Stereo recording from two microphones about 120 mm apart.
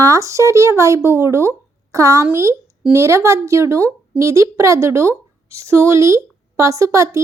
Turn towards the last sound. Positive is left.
turn(degrees=-25)  # may be behind; listen again after turning